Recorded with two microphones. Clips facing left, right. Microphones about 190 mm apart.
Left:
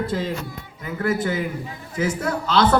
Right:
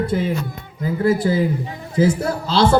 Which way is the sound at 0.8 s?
30° right (ahead or behind).